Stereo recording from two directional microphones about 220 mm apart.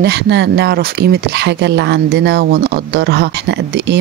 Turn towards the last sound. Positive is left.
turn(degrees=-45)  # may be behind; listen again after turning